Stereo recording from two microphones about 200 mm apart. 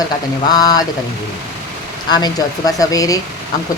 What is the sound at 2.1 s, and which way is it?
Speech, 20° left (ahead or behind).